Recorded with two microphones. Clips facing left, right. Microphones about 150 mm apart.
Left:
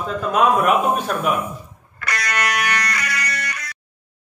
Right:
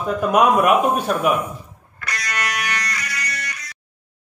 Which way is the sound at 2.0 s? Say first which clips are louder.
Left 3 dB; 65° left (ahead or behind).